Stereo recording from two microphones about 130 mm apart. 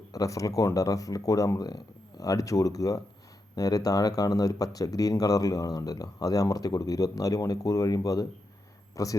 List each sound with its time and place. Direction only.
0.1 s speech: 25° left (ahead or behind)